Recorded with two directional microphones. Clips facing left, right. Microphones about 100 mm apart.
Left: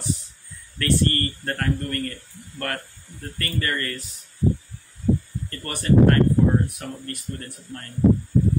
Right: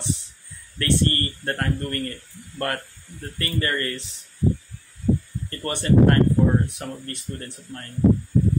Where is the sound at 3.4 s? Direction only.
25° right (ahead or behind).